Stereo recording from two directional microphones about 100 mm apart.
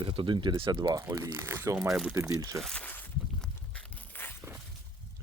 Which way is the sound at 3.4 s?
15° left (ahead or behind).